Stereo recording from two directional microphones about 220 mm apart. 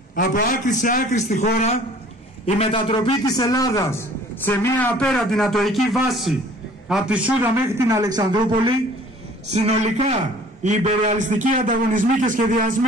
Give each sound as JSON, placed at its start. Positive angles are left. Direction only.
{"t": 0.1, "sound": "a man's voice", "side_deg": 40}
{"t": 9.5, "sound": "a man's voice", "side_deg": -30}